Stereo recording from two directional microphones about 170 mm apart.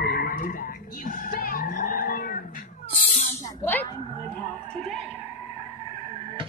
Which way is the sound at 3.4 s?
15° left (ahead or behind).